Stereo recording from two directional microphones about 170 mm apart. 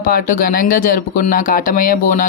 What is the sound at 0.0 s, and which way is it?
Speech, 55° left (ahead or behind).